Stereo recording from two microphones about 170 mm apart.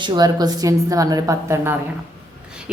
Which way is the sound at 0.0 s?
25° right (ahead or behind).